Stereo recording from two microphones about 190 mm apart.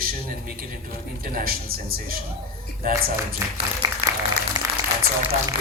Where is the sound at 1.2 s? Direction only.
50° right (ahead or behind).